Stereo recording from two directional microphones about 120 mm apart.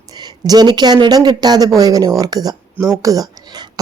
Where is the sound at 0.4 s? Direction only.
35° right (ahead or behind).